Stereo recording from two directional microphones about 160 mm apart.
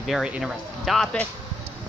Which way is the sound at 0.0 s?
5° right (ahead or behind).